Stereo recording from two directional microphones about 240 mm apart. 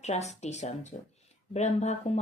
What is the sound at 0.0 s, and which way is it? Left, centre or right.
Speech, left.